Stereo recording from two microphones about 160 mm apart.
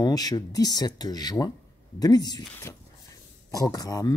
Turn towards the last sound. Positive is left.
turn(degrees=25)  # may be behind; listen again after turning